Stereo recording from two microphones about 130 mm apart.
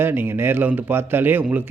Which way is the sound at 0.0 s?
15° right (ahead or behind).